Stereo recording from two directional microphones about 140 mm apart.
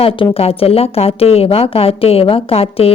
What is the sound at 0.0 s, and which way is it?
Speech, 40° left (ahead or behind).